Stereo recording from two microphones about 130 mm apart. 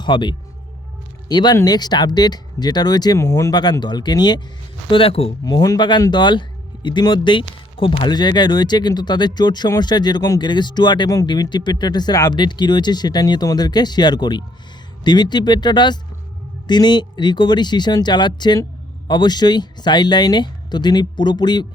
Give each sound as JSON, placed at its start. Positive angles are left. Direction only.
{"t": 0.0, "sound": "speech", "side_deg": 35}
{"t": 3.5, "sound": "speech", "side_deg": 35}
{"t": 4.9, "sound": "speech", "side_deg": 45}
{"t": 5.5, "sound": "speech", "side_deg": 30}